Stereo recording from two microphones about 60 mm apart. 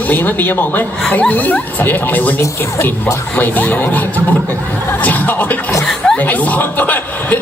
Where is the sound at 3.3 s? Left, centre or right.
Left.